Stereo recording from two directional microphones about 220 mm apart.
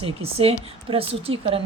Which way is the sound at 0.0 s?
25° right (ahead or behind).